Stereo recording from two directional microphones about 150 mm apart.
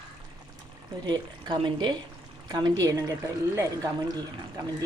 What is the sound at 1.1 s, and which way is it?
A woman's voice, 30° right (ahead or behind).